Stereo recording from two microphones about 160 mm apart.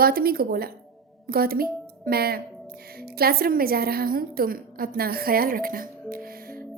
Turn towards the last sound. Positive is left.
turn(degrees=-65)  # may be behind; listen again after turning